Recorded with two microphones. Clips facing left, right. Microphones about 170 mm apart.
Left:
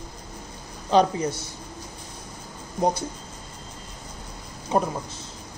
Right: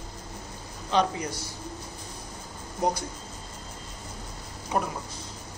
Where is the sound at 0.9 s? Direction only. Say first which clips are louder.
Left 6 dB; 35° left (ahead or behind).